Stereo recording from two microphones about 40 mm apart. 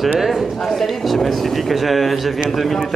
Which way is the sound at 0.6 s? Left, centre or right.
Centre.